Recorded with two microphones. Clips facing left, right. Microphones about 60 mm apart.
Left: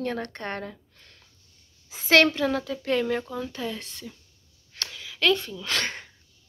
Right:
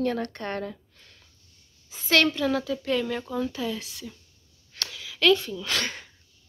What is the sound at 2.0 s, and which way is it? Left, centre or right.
Speech, left.